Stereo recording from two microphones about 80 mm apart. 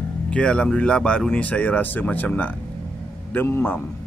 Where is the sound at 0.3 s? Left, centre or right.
Centre.